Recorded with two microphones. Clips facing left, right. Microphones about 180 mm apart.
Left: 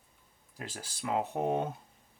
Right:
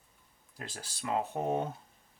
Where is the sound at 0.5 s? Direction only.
10° left (ahead or behind).